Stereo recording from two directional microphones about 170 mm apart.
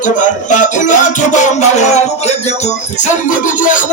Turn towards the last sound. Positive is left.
turn(degrees=50)  # may be behind; listen again after turning